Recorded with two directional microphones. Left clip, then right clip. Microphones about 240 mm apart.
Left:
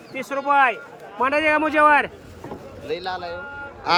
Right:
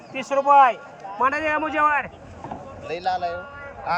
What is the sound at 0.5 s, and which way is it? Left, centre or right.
Speech, centre.